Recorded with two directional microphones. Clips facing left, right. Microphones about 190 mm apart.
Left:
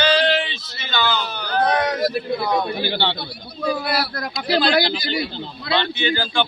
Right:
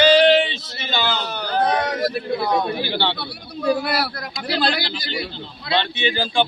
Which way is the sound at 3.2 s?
65° right (ahead or behind).